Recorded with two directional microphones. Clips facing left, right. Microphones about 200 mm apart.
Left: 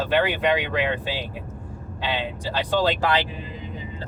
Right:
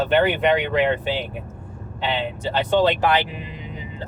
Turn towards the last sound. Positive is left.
turn(degrees=-20)  # may be behind; listen again after turning